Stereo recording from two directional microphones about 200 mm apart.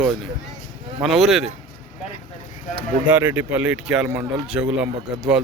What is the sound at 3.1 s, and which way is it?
Speech, 10° right (ahead or behind).